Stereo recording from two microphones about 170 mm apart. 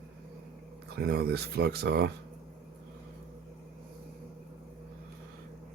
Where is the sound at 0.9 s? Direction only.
70° right (ahead or behind).